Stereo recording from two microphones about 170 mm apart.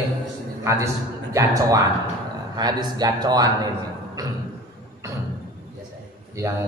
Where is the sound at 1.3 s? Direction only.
20° right (ahead or behind).